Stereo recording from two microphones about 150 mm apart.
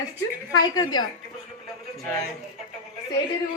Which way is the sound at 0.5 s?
25° left (ahead or behind).